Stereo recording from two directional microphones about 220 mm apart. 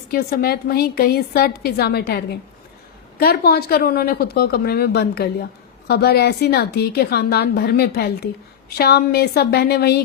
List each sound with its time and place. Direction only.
0.1 s a woman's voice: 45° left (ahead or behind)